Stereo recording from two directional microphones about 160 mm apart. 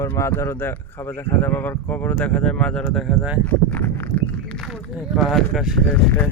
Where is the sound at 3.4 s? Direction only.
10° left (ahead or behind).